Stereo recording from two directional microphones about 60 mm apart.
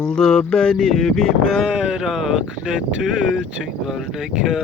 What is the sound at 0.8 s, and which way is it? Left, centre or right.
Speech, centre.